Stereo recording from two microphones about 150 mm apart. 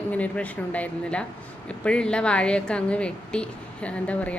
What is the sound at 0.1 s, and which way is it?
A woman's voice, 10° left (ahead or behind).